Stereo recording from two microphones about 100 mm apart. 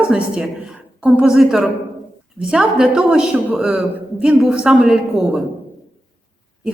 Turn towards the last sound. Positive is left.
turn(degrees=-5)  # may be behind; listen again after turning